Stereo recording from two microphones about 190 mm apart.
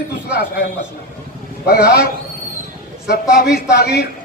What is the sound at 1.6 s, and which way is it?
Speech, 55° left (ahead or behind).